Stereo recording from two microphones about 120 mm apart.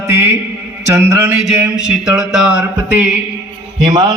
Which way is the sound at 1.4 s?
5° right (ahead or behind).